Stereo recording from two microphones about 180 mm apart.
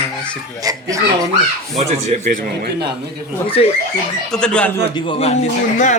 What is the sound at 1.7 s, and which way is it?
Speech, 40° right (ahead or behind).